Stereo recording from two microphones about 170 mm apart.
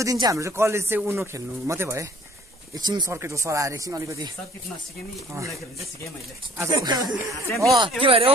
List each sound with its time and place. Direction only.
0.0 s speech: 20° right (ahead or behind)
6.6 s speech: 25° right (ahead or behind)